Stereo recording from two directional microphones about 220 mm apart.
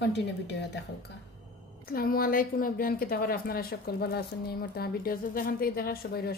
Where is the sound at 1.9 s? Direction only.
40° left (ahead or behind).